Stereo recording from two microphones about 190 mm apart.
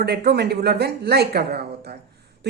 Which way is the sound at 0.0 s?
60° right (ahead or behind).